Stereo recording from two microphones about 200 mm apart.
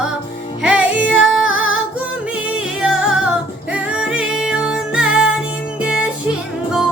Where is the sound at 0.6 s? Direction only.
5° right (ahead or behind).